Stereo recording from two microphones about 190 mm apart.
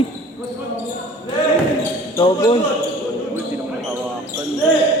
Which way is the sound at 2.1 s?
25° left (ahead or behind).